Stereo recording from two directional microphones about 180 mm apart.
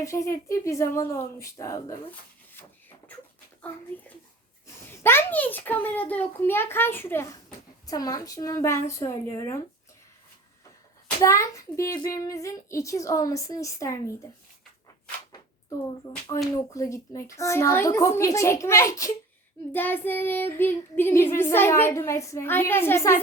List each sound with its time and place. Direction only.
0.0 s child singing: 15° left (ahead or behind)
4.6 s child singing: 15° left (ahead or behind)
11.2 s child singing: 15° left (ahead or behind)
16.1 s speech: 20° left (ahead or behind)
16.7 s child singing: 20° left (ahead or behind)